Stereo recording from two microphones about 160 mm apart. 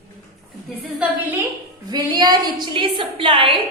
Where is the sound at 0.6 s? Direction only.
10° right (ahead or behind).